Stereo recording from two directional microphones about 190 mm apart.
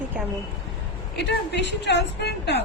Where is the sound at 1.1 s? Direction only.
65° left (ahead or behind).